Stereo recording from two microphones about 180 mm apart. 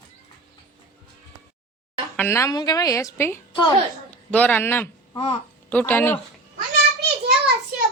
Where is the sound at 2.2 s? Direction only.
15° left (ahead or behind).